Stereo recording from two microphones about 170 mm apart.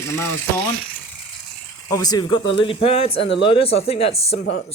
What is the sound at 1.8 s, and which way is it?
Speech, 20° left (ahead or behind).